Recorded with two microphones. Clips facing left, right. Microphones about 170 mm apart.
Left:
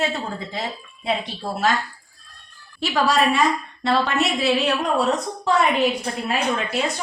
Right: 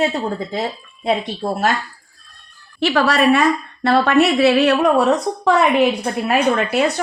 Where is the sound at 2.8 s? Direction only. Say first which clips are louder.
Right 4 dB; 65° right (ahead or behind).